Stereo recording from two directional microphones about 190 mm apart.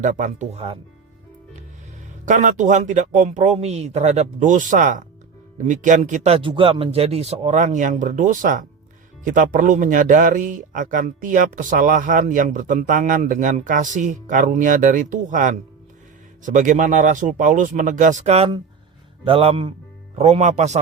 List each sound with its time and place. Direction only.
0.0 s speech: 40° right (ahead or behind)
2.2 s a man's voice: 40° right (ahead or behind)